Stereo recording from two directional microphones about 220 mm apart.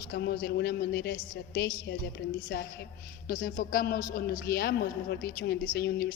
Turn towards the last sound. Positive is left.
turn(degrees=45)  # may be behind; listen again after turning